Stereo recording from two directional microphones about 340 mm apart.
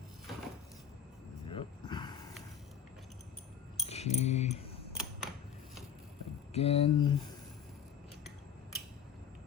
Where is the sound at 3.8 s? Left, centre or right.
Centre.